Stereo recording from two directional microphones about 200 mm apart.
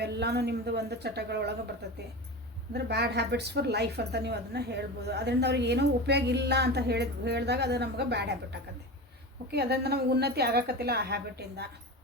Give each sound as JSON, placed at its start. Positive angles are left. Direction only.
{"t": 0.0, "sound": "a woman's voice", "side_deg": -55}
{"t": 2.7, "sound": "a woman's voice", "side_deg": -55}